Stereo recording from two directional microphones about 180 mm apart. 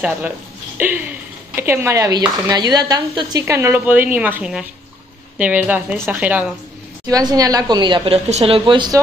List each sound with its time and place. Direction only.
0.7 s a sound: 10° right (ahead or behind)
1.5 s speech: 15° right (ahead or behind)
7.1 s speech: 20° right (ahead or behind)